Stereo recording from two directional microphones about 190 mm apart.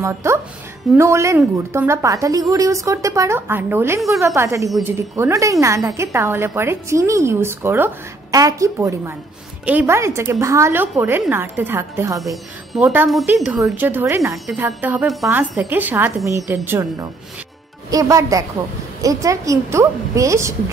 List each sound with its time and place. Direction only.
0.0 s a woman's voice: 15° right (ahead or behind)